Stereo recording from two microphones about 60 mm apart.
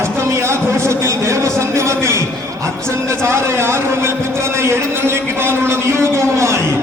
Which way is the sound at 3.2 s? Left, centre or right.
Right.